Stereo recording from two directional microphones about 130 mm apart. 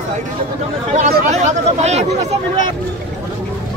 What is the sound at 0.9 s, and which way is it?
Speech, 60° right (ahead or behind).